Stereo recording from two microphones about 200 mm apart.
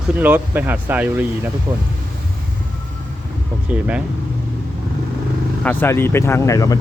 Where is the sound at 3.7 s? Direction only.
5° right (ahead or behind).